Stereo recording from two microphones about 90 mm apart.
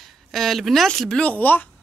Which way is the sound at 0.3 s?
Centre (ahead or behind).